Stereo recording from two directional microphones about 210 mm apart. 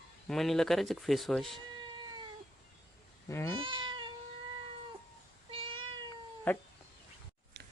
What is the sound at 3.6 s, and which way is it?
Cat, 20° right (ahead or behind).